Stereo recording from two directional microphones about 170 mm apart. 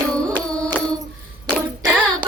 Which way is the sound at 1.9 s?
10° right (ahead or behind).